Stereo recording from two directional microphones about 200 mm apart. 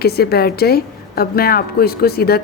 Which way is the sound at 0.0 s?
50° left (ahead or behind).